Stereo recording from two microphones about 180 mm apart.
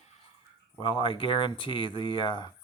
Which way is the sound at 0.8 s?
30° left (ahead or behind).